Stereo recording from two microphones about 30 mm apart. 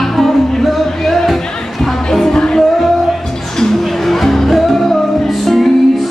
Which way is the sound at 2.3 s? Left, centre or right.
Left.